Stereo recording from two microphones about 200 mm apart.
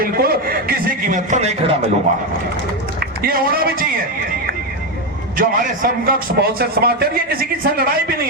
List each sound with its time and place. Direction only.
0.0 s a sound: 50° right (ahead or behind)
3.2 s a man's voice: 50° right (ahead or behind)
5.4 s a man's voice: 45° right (ahead or behind)